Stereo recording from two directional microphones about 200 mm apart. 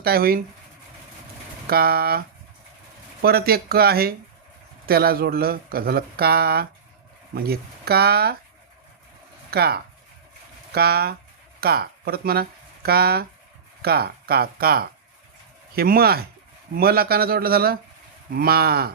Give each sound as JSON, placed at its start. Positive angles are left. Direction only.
{"t": 0.0, "sound": "speech", "side_deg": -50}
{"t": 1.6, "sound": "speech", "side_deg": -50}
{"t": 9.5, "sound": "speech", "side_deg": -50}